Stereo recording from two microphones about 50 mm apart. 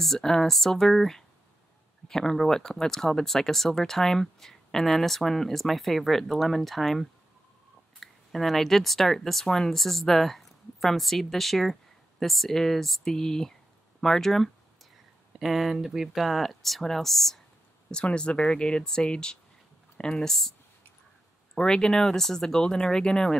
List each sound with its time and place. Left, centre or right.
0.0 s speech: centre
15.3 s speech: centre
17.9 s speech: centre
21.5 s speech: centre